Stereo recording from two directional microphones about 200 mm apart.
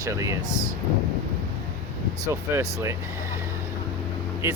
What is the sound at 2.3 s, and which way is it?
Speech, 15° right (ahead or behind).